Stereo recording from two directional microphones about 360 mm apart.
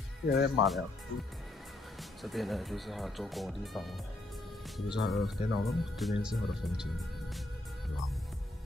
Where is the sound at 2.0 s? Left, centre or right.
Centre.